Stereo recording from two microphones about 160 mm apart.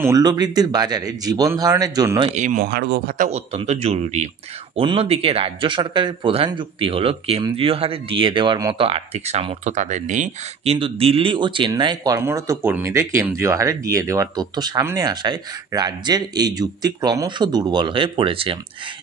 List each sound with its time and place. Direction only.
0.0 s speech: 25° right (ahead or behind)
2.2 s speech: 50° right (ahead or behind)
2.6 s speech: 90° right
3.2 s speech: 40° right (ahead or behind)
8.8 s speech: 40° right (ahead or behind)